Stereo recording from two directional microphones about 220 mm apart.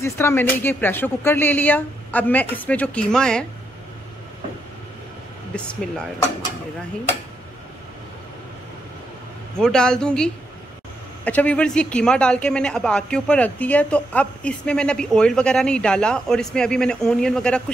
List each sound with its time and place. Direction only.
0.0 s speech: 10° left (ahead or behind)
5.7 s a man's voice: 5° left (ahead or behind)
9.6 s a man's voice: 5° left (ahead or behind)